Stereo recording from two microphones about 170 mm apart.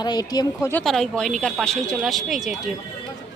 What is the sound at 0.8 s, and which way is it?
Speech, 5° left (ahead or behind).